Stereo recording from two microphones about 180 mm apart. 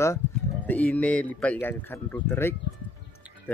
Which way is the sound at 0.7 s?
10° left (ahead or behind).